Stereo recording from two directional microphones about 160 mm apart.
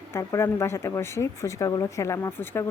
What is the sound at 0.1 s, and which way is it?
Speech, 15° left (ahead or behind).